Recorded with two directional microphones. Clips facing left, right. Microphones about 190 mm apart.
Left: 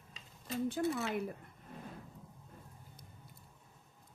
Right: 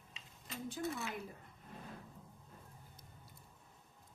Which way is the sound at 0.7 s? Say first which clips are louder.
Left 5 dB; 65° left (ahead or behind).